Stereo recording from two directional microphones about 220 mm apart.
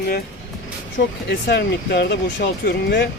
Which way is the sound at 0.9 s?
50° left (ahead or behind).